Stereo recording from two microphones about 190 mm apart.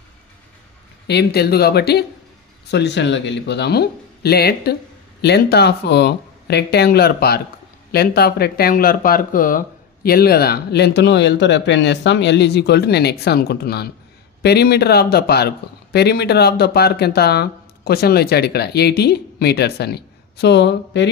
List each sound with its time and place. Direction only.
1.0 s speech: 60° left (ahead or behind)